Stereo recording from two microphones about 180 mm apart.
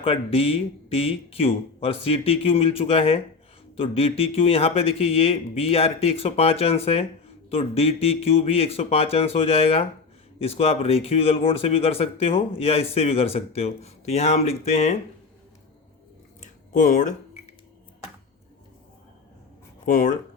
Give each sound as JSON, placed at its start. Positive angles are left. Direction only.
{"t": 0.0, "sound": "speech", "side_deg": 30}
{"t": 16.4, "sound": "a sound", "side_deg": 45}
{"t": 19.8, "sound": "speech", "side_deg": 45}